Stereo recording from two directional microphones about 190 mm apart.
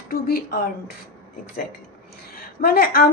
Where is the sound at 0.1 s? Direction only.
50° left (ahead or behind).